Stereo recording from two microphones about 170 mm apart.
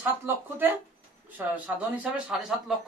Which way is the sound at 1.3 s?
10° right (ahead or behind).